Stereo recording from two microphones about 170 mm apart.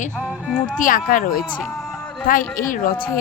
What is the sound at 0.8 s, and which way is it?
A woman's voice, 55° left (ahead or behind).